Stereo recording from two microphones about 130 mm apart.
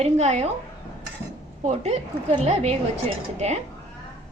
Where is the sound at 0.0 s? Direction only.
60° right (ahead or behind).